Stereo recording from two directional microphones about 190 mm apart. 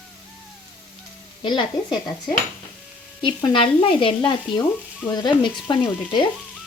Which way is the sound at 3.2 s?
25° left (ahead or behind).